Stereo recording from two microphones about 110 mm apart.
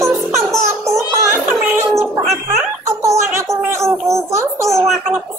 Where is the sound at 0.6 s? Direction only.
25° right (ahead or behind).